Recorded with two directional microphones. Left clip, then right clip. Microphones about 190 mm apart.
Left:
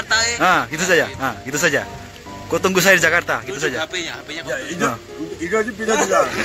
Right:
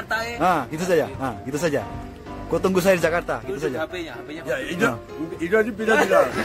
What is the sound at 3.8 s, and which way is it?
Speech, 45° right (ahead or behind).